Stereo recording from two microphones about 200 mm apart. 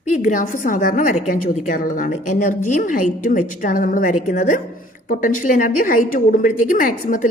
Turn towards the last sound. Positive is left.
turn(degrees=40)  # may be behind; listen again after turning